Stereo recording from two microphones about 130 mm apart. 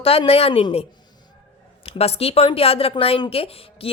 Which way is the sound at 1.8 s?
50° left (ahead or behind).